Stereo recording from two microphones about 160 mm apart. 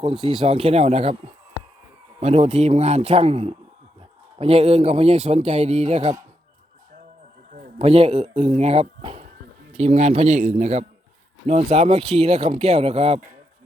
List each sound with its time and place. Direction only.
0.0 s speech: 30° right (ahead or behind)
2.2 s speech: 40° right (ahead or behind)
7.8 s speech: 40° right (ahead or behind)